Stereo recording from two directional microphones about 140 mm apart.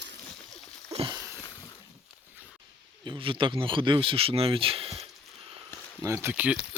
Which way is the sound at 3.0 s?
35° right (ahead or behind).